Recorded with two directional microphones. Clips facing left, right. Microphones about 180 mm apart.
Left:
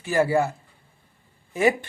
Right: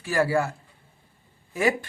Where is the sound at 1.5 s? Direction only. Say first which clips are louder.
Left 3 dB; 20° left (ahead or behind).